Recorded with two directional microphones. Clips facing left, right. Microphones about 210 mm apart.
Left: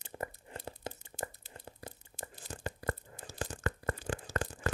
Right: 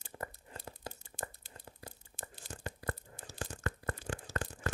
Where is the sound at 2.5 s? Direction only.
90° left.